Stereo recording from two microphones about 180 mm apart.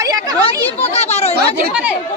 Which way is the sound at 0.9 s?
35° left (ahead or behind).